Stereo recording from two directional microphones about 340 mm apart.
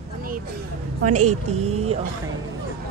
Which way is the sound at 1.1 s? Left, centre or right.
Centre.